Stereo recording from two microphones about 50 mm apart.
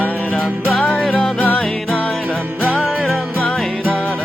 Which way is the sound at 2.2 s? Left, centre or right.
Right.